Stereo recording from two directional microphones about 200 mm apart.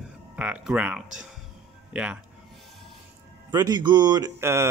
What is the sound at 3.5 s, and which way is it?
Speech, 20° right (ahead or behind).